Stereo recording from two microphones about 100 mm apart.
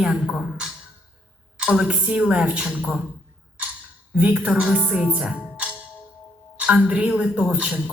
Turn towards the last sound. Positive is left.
turn(degrees=-15)  # may be behind; listen again after turning